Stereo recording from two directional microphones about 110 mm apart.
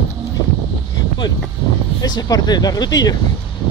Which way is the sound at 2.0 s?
35° left (ahead or behind).